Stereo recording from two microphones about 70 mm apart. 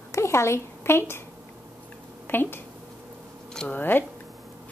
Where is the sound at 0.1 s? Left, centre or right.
Left.